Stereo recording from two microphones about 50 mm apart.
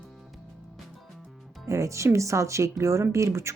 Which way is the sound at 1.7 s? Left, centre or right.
Right.